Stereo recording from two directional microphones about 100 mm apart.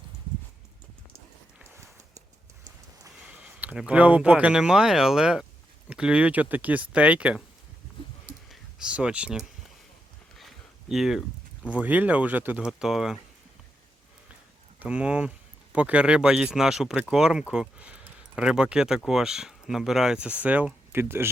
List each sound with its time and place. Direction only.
3.2 s a sound: 10° right (ahead or behind)
3.8 s speech: 15° right (ahead or behind)
8.4 s speech: 10° right (ahead or behind)
10.3 s a sound: centre (ahead or behind)
11.7 s speech: 15° right (ahead or behind)
12.8 s speech: 5° right (ahead or behind)
14.8 s speech: 10° right (ahead or behind)